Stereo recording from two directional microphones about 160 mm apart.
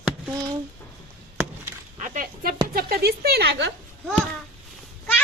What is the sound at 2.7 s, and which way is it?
Speech, 70° right (ahead or behind).